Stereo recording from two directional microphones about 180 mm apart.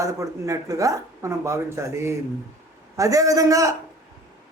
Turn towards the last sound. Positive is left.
turn(degrees=-20)  # may be behind; listen again after turning